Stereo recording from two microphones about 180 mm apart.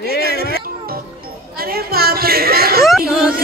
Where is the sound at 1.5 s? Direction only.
60° right (ahead or behind).